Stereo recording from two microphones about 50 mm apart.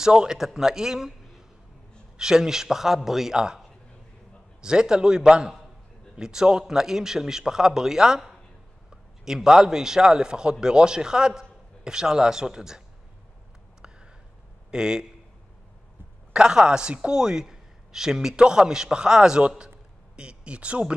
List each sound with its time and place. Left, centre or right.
0.0 s a man's voice: centre
13.7 s a sound: centre
14.7 s a man's voice: centre
16.3 s a man's voice: centre